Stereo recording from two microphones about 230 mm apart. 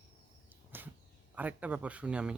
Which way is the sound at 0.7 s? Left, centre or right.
Centre.